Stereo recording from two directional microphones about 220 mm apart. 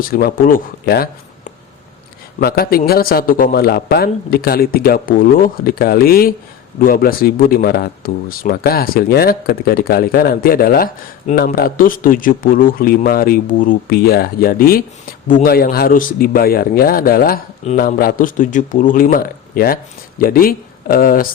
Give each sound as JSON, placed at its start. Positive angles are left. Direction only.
{"t": 0.0, "sound": "speech", "side_deg": 40}
{"t": 2.4, "sound": "a man's voice", "side_deg": 45}